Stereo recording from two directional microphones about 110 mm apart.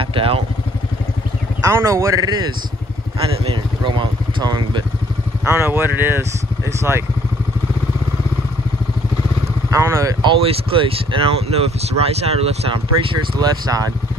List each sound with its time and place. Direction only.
0.0 s vehicle: 55° right (ahead or behind)
1.6 s a man's voice: 30° right (ahead or behind)
3.4 s speech: 45° right (ahead or behind)
5.5 s a man's voice: 20° right (ahead or behind)
9.7 s speech: 25° right (ahead or behind)
10.2 s speech: 55° right (ahead or behind)